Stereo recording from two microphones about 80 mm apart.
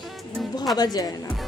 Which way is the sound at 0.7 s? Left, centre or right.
Left.